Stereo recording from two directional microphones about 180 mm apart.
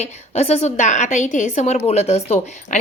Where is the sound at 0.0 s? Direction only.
35° left (ahead or behind).